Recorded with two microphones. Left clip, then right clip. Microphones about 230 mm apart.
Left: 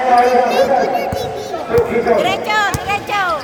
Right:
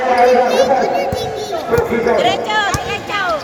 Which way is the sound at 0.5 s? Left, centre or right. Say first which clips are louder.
Even; right.